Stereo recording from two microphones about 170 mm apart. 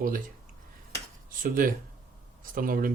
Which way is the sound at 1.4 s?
55° right (ahead or behind).